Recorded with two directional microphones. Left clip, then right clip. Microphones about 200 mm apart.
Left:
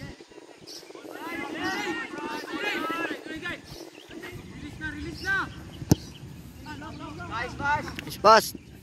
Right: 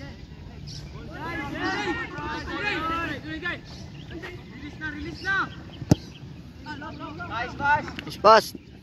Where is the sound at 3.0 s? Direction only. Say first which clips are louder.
Right 2 dB; 40° left (ahead or behind).